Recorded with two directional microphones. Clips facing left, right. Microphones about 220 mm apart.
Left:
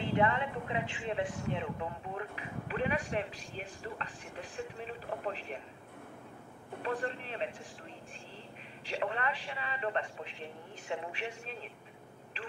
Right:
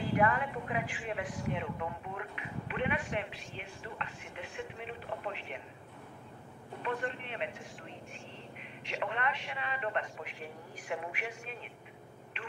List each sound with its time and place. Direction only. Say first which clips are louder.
0.1 s speech: even; 25° left (ahead or behind)
6.8 s speech: left 1 dB; 35° left (ahead or behind)
8.8 s speech: left 1 dB; 35° left (ahead or behind)